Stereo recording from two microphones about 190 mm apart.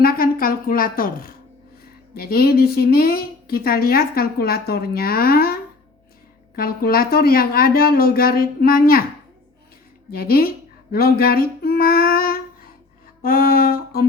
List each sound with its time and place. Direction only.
0.0 s a woman's voice: 50° left (ahead or behind)
6.6 s a woman's voice: 50° left (ahead or behind)
10.1 s a woman's voice: 50° left (ahead or behind)
13.2 s music: 50° left (ahead or behind)